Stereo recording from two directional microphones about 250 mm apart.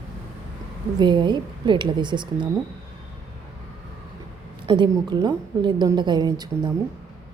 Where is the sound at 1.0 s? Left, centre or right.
Centre.